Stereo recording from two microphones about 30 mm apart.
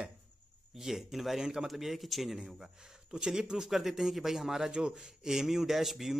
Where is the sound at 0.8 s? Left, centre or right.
Centre.